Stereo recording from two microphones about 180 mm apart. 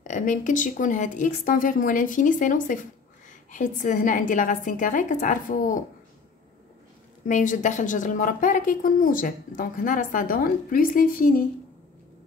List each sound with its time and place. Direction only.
0.0 s a woman's voice: 45° left (ahead or behind)
7.2 s a woman's voice: 45° left (ahead or behind)